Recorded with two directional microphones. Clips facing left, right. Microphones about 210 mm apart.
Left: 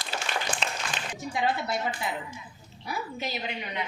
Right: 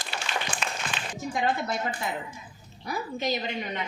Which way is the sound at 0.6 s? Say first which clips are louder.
Left 1 dB; 25° left (ahead or behind).